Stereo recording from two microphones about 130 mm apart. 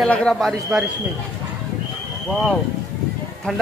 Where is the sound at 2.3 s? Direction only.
Centre (ahead or behind).